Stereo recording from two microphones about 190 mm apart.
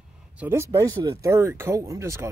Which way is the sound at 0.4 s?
15° right (ahead or behind).